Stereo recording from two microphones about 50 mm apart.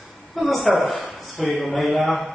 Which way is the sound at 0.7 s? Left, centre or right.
Left.